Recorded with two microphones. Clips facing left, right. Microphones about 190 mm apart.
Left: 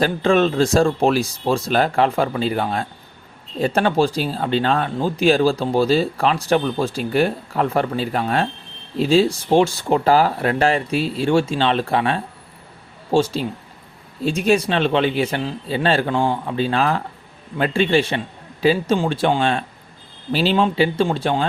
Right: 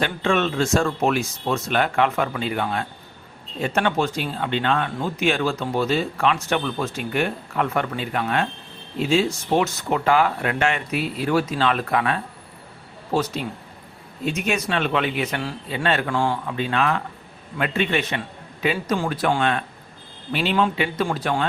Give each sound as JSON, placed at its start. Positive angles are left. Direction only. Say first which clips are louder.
{"t": 0.0, "sound": "speech", "louder": "left 5 dB", "side_deg": 35}